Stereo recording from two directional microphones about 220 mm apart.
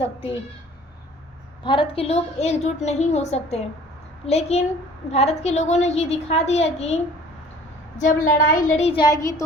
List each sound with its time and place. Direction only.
0.0 s a woman's voice: 25° left (ahead or behind)
1.6 s a woman's voice: 20° left (ahead or behind)